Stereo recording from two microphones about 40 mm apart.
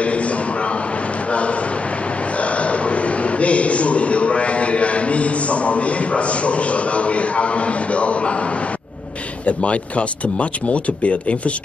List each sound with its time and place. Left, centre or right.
0.0 s a sound: left
1.3 s a man's voice: left
9.5 s a man's voice: left